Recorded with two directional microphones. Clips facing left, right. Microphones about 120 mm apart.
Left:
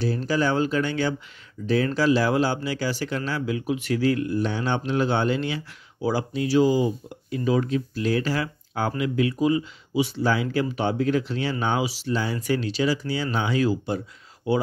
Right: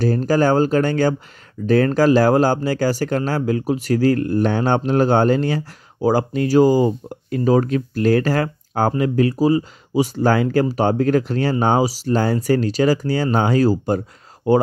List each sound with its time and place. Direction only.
0.0 s speech: 45° right (ahead or behind)